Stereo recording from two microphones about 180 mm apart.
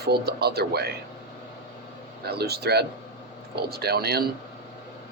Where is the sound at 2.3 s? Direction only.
65° right (ahead or behind).